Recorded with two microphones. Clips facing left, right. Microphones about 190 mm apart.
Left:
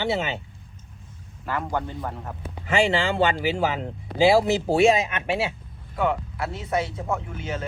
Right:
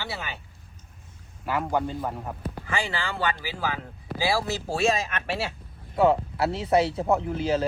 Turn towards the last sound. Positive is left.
turn(degrees=-35)  # may be behind; listen again after turning